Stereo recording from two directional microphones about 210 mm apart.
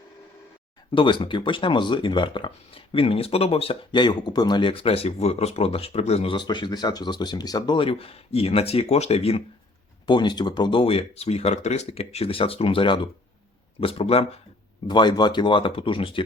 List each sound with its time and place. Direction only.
0.9 s speech: 25° left (ahead or behind)